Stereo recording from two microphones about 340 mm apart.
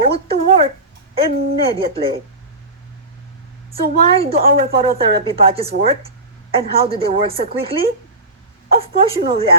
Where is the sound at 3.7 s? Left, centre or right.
Right.